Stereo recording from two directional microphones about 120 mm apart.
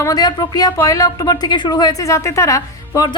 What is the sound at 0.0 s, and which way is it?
A woman's voice, 35° left (ahead or behind).